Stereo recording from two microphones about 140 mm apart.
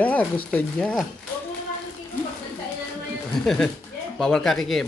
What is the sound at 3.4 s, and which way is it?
A woman's voice, 5° left (ahead or behind).